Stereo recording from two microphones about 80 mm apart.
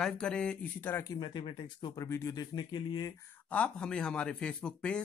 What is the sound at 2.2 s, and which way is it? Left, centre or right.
Speech, left.